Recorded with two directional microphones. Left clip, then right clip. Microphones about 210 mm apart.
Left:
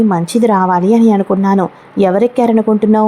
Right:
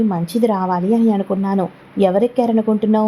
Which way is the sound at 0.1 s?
15° left (ahead or behind).